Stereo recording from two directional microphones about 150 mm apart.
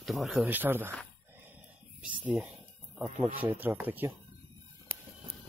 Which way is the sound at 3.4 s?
15° right (ahead or behind).